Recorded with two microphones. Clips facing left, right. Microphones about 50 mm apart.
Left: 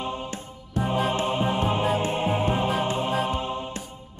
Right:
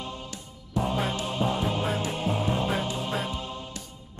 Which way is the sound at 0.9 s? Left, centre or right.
Left.